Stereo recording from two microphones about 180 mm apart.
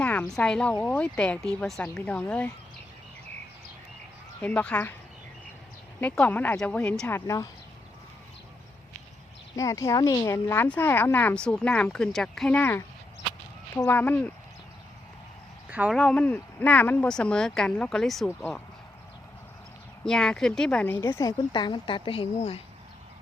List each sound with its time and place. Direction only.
0.0 s speech: 5° left (ahead or behind)
4.4 s speech: 5° left (ahead or behind)
6.0 s speech: 10° left (ahead or behind)
9.6 s speech: 15° left (ahead or behind)
15.7 s speech: 5° right (ahead or behind)
20.1 s speech: 5° left (ahead or behind); by 22.6 s 35° left (ahead or behind)